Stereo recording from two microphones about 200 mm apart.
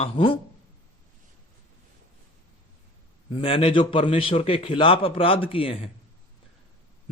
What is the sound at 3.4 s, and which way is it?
A man's voice, 25° left (ahead or behind).